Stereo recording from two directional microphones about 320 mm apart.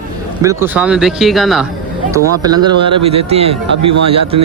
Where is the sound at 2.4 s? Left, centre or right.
Centre.